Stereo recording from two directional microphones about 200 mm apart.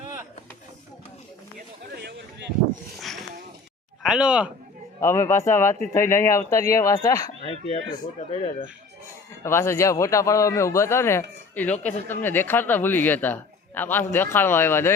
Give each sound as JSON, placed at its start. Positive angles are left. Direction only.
{"t": 1.5, "sound": "a sound", "side_deg": -55}
{"t": 4.0, "sound": "speech", "side_deg": -5}
{"t": 4.9, "sound": "a man's voice", "side_deg": 10}
{"t": 7.4, "sound": "speech", "side_deg": 30}
{"t": 9.4, "sound": "a man's voice", "side_deg": 15}